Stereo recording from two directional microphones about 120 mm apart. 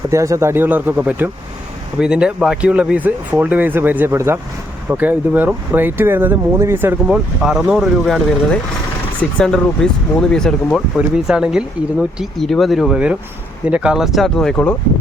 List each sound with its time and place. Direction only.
0.1 s speech: 25° right (ahead or behind)
7.4 s speech: 5° right (ahead or behind)
10.9 s speech: 5° right (ahead or behind)
14.5 s speech: 15° left (ahead or behind)